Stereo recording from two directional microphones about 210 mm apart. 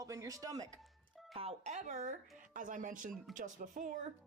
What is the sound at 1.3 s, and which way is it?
A woman's voice, 30° right (ahead or behind).